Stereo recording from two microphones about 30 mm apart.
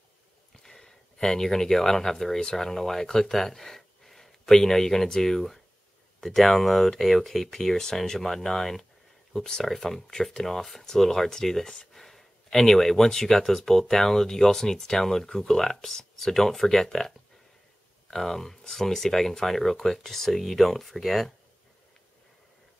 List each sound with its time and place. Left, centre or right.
0.6 s speech: centre
9.7 s speech: centre
11.6 s speech: left
11.9 s speech: centre
18.1 s speech: centre